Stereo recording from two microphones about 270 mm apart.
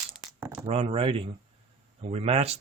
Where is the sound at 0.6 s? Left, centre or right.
Right.